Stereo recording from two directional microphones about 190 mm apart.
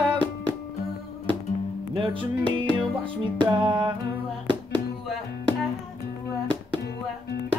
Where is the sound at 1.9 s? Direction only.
25° right (ahead or behind).